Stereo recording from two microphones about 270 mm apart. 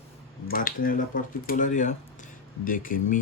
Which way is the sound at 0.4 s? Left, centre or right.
Left.